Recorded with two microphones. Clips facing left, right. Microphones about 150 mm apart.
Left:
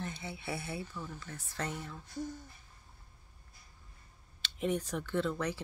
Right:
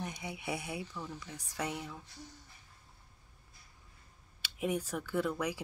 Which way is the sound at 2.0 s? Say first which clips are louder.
Left 12 dB; 50° left (ahead or behind).